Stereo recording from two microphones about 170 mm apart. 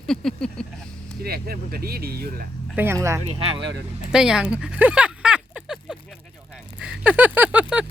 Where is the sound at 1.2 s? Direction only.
65° right (ahead or behind).